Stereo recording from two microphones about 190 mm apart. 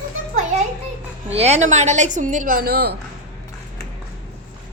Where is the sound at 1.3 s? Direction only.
35° right (ahead or behind); by 3.0 s 55° right (ahead or behind).